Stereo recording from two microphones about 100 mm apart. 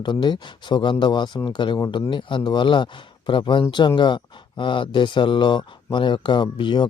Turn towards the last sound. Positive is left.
turn(degrees=50)  # may be behind; listen again after turning